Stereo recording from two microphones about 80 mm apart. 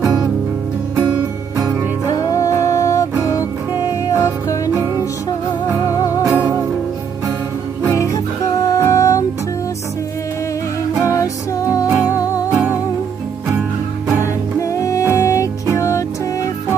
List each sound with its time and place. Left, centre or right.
0.0 s music: right
2.6 s music: left
5.9 s music: left
6.3 s music: right
7.9 s music: left
11.1 s music: left
12.5 s music: right
14.6 s music: left